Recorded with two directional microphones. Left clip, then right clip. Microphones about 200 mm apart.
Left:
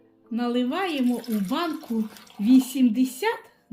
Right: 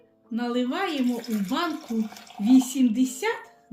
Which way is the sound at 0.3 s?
30° left (ahead or behind).